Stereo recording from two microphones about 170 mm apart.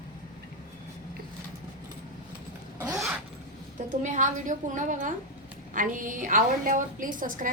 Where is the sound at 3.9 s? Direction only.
45° right (ahead or behind).